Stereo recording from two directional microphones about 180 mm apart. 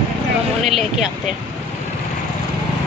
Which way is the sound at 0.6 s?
Centre (ahead or behind).